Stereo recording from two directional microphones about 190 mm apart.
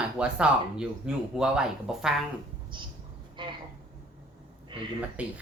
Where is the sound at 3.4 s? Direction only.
25° right (ahead or behind).